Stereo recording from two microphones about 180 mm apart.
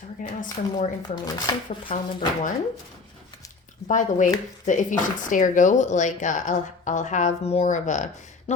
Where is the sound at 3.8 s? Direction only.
45° left (ahead or behind).